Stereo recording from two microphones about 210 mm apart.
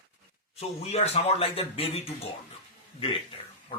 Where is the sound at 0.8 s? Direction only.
30° left (ahead or behind).